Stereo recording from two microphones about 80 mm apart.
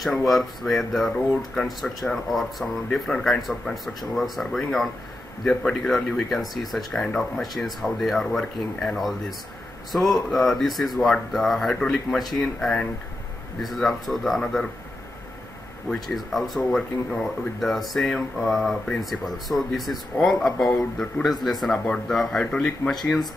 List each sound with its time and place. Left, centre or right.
0.0 s speech: centre
16.3 s speech: centre